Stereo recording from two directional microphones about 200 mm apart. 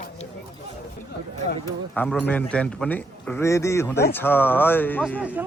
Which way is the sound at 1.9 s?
5° left (ahead or behind).